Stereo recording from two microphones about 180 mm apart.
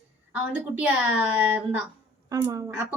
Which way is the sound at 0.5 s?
10° right (ahead or behind).